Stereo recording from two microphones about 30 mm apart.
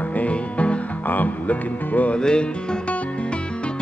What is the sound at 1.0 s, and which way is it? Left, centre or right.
Music, left.